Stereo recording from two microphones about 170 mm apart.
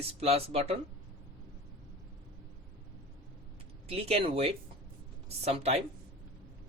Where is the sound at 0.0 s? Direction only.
35° right (ahead or behind).